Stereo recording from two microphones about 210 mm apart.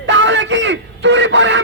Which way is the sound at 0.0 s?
60° right (ahead or behind).